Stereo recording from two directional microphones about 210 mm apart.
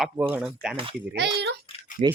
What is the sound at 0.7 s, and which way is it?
Speech, 25° right (ahead or behind).